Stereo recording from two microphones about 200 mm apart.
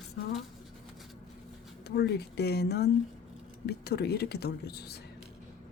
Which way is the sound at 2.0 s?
55° left (ahead or behind).